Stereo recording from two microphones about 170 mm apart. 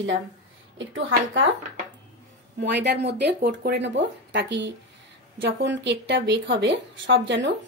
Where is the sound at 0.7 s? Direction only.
90° right.